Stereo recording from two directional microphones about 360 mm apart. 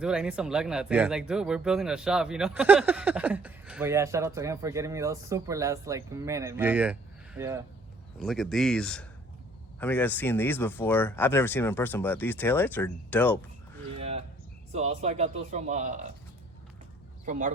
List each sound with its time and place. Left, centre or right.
0.0 s speech: centre
14.8 s speech: centre
17.2 s speech: right